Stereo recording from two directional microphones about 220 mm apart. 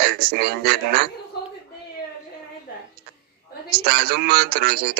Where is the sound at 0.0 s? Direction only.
45° right (ahead or behind).